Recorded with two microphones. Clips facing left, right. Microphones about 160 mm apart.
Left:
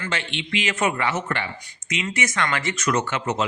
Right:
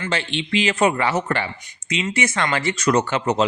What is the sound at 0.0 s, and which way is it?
Speech, 35° right (ahead or behind).